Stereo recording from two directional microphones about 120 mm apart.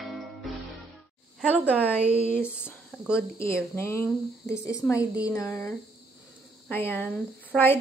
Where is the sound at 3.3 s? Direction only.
20° left (ahead or behind).